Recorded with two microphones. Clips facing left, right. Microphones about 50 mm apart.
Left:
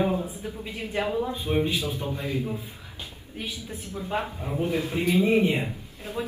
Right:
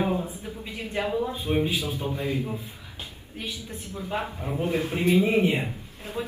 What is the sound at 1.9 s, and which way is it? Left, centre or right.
Speech, right.